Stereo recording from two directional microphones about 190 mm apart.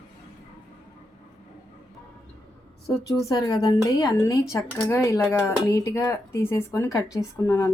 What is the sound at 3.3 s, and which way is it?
A woman's voice, 20° left (ahead or behind).